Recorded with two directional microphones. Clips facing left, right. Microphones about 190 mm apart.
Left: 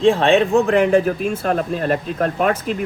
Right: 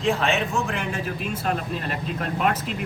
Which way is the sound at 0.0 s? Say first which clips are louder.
Left 9 dB; 30° left (ahead or behind).